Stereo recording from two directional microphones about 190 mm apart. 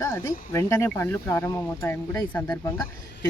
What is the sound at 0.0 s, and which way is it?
Speech, 20° left (ahead or behind).